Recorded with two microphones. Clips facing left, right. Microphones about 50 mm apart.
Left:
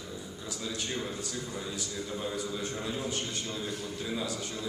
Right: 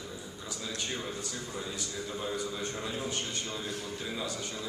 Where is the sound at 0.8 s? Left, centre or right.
Centre.